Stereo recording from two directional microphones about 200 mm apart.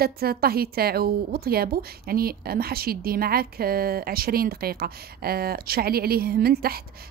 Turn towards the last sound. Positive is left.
turn(degrees=-50)  # may be behind; listen again after turning